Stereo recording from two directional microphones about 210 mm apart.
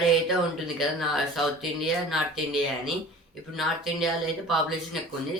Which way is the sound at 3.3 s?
Centre (ahead or behind).